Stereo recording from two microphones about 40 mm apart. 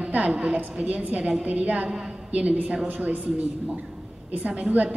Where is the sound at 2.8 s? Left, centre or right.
Right.